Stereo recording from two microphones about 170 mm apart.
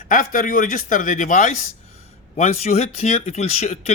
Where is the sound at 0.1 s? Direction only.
55° left (ahead or behind).